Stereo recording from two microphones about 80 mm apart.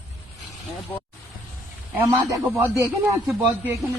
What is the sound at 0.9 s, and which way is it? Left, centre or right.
Speech, left.